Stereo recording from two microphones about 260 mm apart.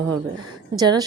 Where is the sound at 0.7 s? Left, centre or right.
Centre.